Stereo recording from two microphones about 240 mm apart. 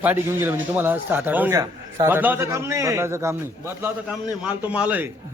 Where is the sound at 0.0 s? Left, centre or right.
Centre.